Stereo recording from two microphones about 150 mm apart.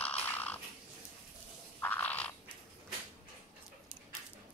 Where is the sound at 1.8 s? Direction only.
10° left (ahead or behind).